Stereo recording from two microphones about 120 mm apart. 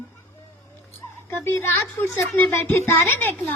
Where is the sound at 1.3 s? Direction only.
20° left (ahead or behind).